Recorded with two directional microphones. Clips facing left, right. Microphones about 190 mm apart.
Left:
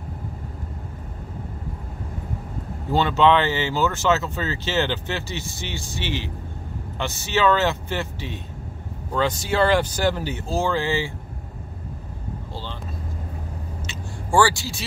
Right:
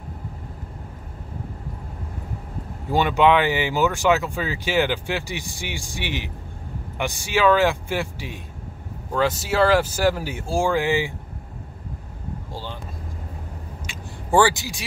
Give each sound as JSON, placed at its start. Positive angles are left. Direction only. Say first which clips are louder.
{"t": 2.9, "sound": "speech", "louder": "even", "side_deg": -15}
{"t": 13.8, "sound": "vehicle", "louder": "right 3 dB", "side_deg": -20}